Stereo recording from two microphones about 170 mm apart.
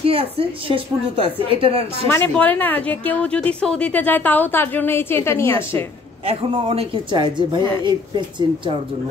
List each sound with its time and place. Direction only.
0.0 s a woman's voice: 35° right (ahead or behind)
2.0 s a woman's voice: 10° left (ahead or behind)
6.2 s speech: 35° right (ahead or behind)